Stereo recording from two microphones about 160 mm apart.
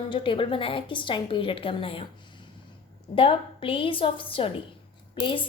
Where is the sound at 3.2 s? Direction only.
35° left (ahead or behind).